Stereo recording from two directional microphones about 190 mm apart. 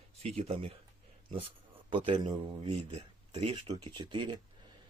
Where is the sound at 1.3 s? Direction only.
25° right (ahead or behind).